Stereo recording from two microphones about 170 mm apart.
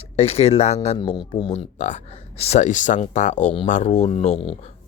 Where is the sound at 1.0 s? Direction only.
30° left (ahead or behind).